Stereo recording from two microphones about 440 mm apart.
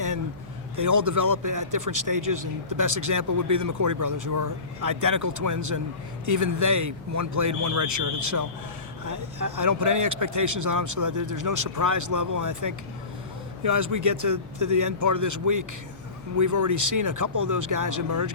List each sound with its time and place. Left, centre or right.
0.8 s speech: right